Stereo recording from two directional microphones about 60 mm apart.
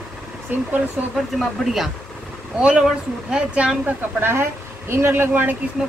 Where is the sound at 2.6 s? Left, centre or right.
Centre.